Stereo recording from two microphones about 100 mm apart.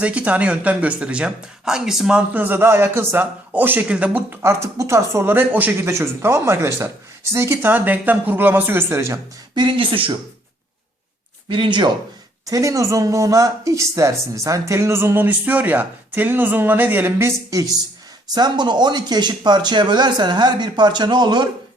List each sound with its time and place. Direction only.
0.0 s speech: 15° right (ahead or behind); by 9.2 s 30° right (ahead or behind)
9.6 s speech: 55° right (ahead or behind)
11.4 s speech: 55° right (ahead or behind)
12.5 s speech: 35° right (ahead or behind)
18.3 s speech: 45° right (ahead or behind)